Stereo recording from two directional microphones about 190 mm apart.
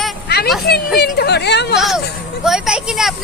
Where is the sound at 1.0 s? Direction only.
60° left (ahead or behind).